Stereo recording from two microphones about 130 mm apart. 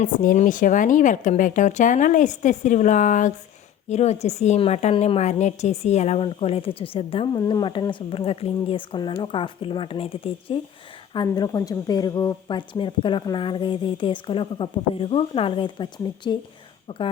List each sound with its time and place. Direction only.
0.0 s speech: 90° left
3.8 s a woman's voice: 60° left (ahead or behind)
7.3 s speech: 30° left (ahead or behind)
11.1 s speech: 35° left (ahead or behind)